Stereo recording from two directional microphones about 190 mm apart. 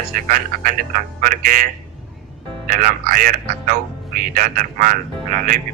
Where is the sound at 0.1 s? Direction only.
45° right (ahead or behind).